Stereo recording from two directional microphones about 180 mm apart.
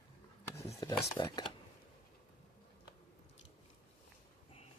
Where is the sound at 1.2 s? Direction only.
25° left (ahead or behind).